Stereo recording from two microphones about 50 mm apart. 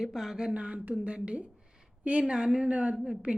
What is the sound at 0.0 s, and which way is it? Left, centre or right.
Speech, centre.